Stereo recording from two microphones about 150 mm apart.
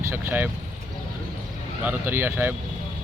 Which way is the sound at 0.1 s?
15° right (ahead or behind).